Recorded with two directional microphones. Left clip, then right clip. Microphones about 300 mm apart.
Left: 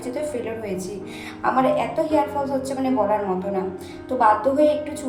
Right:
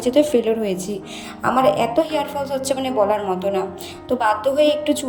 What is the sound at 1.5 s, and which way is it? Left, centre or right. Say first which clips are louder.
A woman's voice: right 5 dB; right.